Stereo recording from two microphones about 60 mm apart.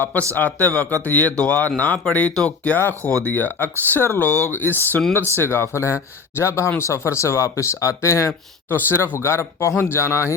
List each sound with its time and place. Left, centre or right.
0.0 s a man's voice: left
2.9 s speech: right
3.2 s speech: left
8.7 s speech: left